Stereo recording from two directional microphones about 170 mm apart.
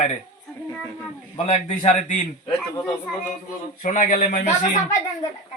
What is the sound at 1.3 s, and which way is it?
Speech, 40° left (ahead or behind).